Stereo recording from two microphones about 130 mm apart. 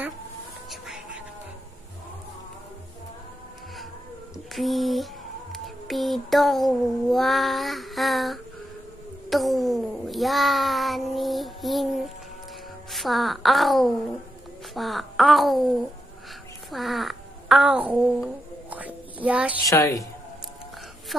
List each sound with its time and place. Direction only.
0.7 s whispering: centre (ahead or behind)
4.5 s a child's voice: centre (ahead or behind)
16.7 s a sound: centre (ahead or behind)
18.0 s music: 10° right (ahead or behind)
19.7 s a woman's voice: 25° left (ahead or behind)
21.1 s a woman's voice: centre (ahead or behind)